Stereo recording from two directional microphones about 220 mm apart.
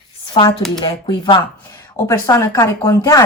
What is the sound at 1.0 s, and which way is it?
A woman's voice, 20° left (ahead or behind).